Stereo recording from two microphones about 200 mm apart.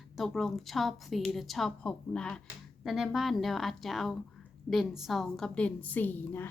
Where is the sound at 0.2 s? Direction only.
Centre (ahead or behind).